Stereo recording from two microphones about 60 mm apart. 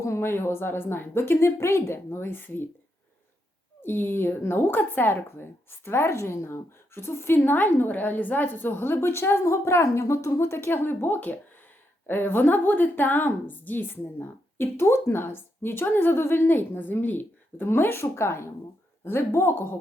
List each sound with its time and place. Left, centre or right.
0.2 s speech: left
3.8 s a woman's voice: left